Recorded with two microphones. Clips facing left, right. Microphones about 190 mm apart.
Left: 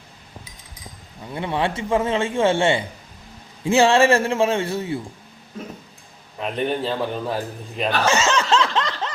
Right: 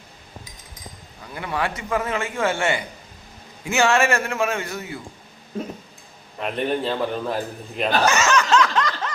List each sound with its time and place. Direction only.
1.2 s a man's voice: 25° left (ahead or behind)
6.4 s a man's voice: centre (ahead or behind)
8.0 s snicker: 25° left (ahead or behind)